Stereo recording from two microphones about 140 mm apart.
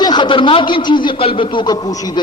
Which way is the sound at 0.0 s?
30° left (ahead or behind).